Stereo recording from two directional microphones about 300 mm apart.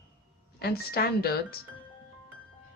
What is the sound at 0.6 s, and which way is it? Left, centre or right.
Speech, left.